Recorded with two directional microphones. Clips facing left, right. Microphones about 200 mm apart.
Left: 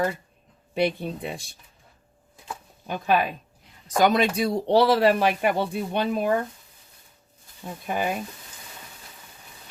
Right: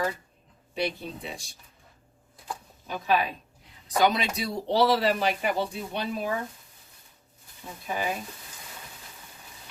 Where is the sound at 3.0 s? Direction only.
50° left (ahead or behind).